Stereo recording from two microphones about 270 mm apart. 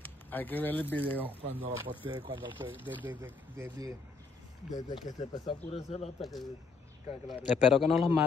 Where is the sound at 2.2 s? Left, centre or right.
Centre.